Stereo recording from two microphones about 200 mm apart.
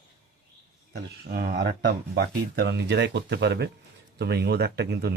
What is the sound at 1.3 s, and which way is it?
Speech, 50° right (ahead or behind).